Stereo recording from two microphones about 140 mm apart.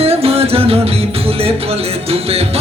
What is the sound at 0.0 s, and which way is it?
Music, 45° right (ahead or behind).